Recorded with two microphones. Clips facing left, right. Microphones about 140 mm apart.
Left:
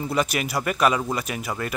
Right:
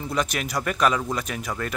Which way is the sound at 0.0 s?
5° left (ahead or behind).